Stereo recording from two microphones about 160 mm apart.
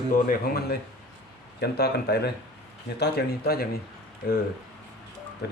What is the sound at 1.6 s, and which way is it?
Speech, 90° left.